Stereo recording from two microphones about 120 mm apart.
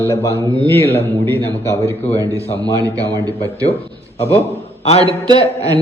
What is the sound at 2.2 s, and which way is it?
Speech, 25° right (ahead or behind).